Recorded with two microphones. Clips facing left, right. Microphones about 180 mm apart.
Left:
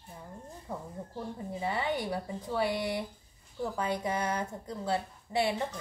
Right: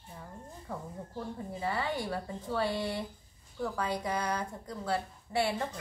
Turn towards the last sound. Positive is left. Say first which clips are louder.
# left 1 dB
turn(degrees=20)  # may be behind; listen again after turning